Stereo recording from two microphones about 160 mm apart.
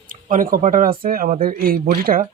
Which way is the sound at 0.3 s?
55° right (ahead or behind).